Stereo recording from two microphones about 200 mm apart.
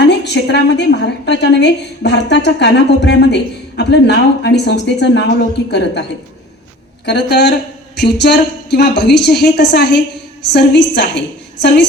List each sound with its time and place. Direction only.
0.0 s a woman's voice: 60° left (ahead or behind)